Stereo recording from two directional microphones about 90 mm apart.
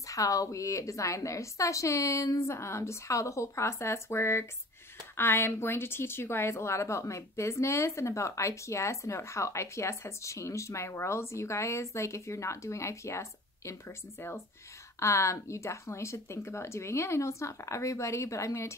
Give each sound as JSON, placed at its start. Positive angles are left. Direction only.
{"t": 0.1, "sound": "a woman's voice", "side_deg": 40}